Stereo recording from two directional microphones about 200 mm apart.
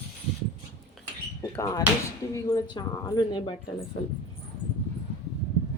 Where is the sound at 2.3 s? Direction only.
15° left (ahead or behind).